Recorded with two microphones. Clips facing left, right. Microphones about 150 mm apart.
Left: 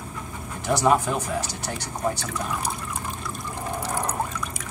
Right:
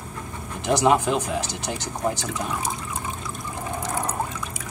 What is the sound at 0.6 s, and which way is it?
Speech, 20° right (ahead or behind).